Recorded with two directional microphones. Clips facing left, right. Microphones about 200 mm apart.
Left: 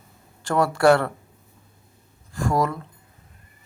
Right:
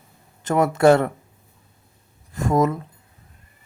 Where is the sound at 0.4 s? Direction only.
20° right (ahead or behind).